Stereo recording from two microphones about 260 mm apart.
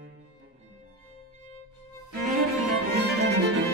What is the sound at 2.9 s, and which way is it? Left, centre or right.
Music, right.